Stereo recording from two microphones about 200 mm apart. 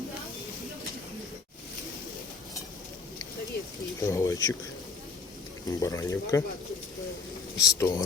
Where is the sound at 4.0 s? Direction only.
15° left (ahead or behind).